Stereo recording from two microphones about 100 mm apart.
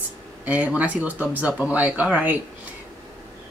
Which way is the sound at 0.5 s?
15° right (ahead or behind).